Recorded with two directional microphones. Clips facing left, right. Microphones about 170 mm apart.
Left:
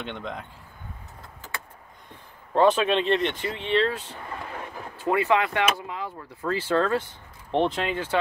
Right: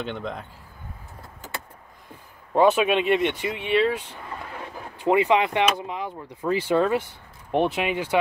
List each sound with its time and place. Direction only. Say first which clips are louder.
0.0 s speech: right 3 dB; centre (ahead or behind)
2.5 s speech: right 1 dB; 10° right (ahead or behind)